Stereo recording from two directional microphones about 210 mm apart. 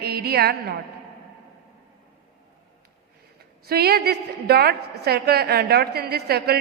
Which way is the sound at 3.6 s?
50° right (ahead or behind).